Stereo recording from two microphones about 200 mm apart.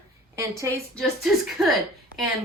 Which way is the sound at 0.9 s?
Centre (ahead or behind).